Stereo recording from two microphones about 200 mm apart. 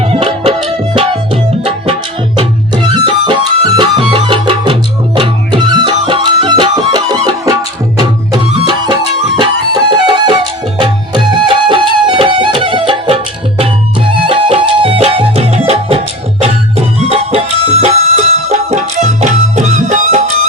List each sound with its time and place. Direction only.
0.0 s music: 25° right (ahead or behind)
9.4 s music: 20° right (ahead or behind)